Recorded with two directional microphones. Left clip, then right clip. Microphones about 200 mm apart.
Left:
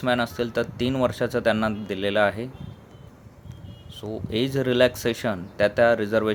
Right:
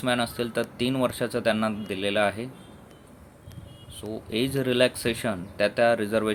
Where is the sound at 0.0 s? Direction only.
10° left (ahead or behind).